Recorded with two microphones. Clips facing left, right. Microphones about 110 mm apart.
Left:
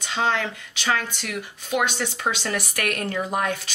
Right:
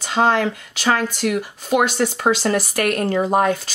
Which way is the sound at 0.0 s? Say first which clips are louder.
Right 7 dB; 40° right (ahead or behind).